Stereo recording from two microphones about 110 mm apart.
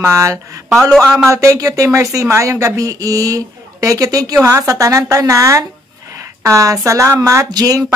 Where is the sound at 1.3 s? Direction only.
30° right (ahead or behind).